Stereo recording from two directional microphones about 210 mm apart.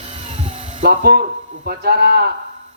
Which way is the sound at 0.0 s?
30° right (ahead or behind).